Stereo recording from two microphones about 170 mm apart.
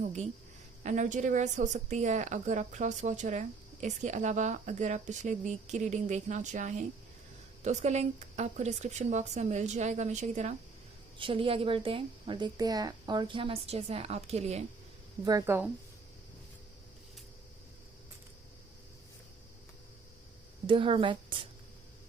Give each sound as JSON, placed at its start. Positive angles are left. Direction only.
{"t": 0.8, "sound": "a woman's voice", "side_deg": -45}
{"t": 11.2, "sound": "a woman's voice", "side_deg": -30}
{"t": 15.2, "sound": "speech", "side_deg": -20}
{"t": 20.7, "sound": "a woman's voice", "side_deg": -30}